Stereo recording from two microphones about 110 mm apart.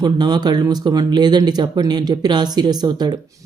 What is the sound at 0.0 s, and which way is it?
Speech, 40° right (ahead or behind).